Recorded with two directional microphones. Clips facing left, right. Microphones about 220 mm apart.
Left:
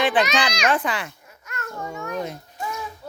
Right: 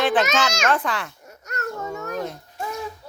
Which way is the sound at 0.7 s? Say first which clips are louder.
Even; centre (ahead or behind).